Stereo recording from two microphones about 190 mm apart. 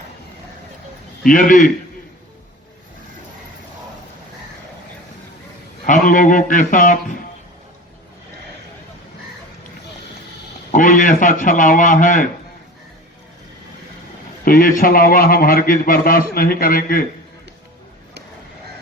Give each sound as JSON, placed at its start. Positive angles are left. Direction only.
{"t": 1.3, "sound": "a man's voice", "side_deg": 45}
{"t": 5.8, "sound": "a man's voice", "side_deg": 45}
{"t": 10.7, "sound": "a man's voice", "side_deg": 45}
{"t": 14.4, "sound": "a man's voice", "side_deg": 45}